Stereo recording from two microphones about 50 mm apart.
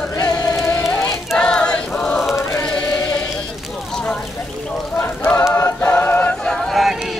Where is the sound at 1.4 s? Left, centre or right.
Centre.